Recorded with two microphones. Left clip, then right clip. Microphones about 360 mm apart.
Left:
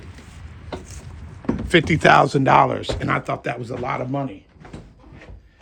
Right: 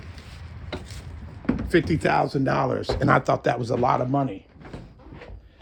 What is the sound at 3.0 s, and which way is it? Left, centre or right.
Speech, centre.